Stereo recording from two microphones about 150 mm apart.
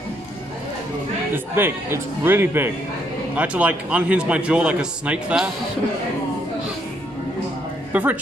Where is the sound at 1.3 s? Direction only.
15° right (ahead or behind).